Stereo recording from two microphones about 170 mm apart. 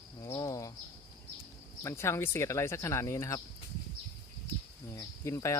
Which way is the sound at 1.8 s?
15° left (ahead or behind).